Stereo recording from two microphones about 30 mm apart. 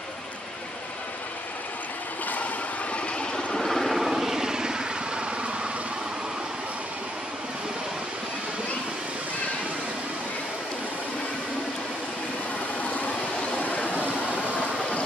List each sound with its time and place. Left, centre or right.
3.5 s vehicle: centre
3.8 s vehicle: centre; by 5.2 s right
13.6 s vehicle: left